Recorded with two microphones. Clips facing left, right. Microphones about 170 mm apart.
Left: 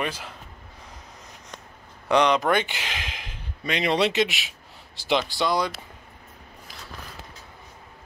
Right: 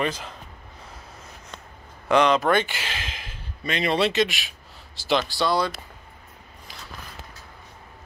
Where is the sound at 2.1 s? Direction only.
15° left (ahead or behind).